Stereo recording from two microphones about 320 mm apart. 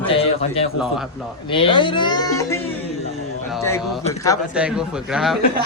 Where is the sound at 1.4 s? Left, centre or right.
Centre.